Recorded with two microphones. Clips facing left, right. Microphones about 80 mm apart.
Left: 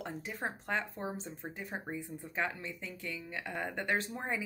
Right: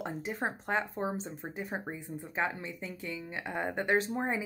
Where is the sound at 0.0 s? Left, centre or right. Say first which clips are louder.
Right 4 dB; right.